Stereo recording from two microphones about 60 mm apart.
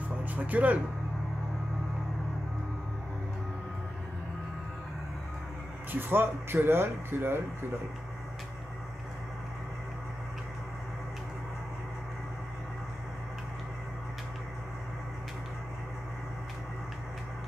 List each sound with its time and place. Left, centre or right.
0.2 s speech: right
5.9 s speech: right